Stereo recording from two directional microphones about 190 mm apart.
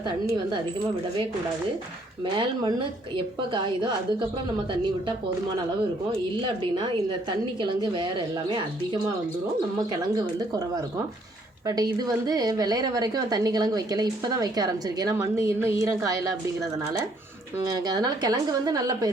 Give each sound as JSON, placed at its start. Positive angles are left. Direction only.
{"t": 2.3, "sound": "a woman's voice", "side_deg": -25}
{"t": 6.6, "sound": "a woman's voice", "side_deg": -25}
{"t": 17.6, "sound": "a woman's voice", "side_deg": -20}